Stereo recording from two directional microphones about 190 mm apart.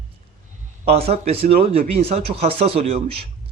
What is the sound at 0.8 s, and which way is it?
Speech, 35° right (ahead or behind).